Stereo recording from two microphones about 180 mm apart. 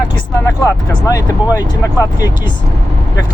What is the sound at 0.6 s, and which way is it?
Speech, 20° left (ahead or behind).